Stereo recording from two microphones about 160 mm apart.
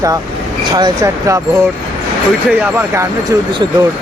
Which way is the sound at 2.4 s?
10° right (ahead or behind).